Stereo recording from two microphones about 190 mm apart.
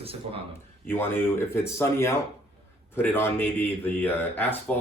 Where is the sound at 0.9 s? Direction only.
10° left (ahead or behind).